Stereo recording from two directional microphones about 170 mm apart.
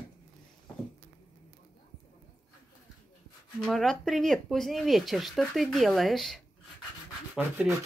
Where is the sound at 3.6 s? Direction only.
Centre (ahead or behind).